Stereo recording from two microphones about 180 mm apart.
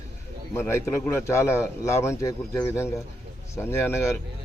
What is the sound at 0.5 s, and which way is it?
Speech, 15° left (ahead or behind).